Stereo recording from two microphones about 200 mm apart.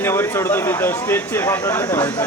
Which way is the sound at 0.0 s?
10° left (ahead or behind).